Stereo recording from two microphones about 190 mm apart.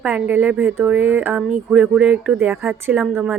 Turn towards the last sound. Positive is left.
turn(degrees=-5)  # may be behind; listen again after turning